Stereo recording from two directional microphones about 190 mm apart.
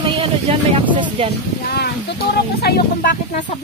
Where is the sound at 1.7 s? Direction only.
55° left (ahead or behind).